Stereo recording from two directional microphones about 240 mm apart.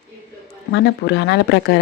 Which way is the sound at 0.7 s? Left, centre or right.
Left.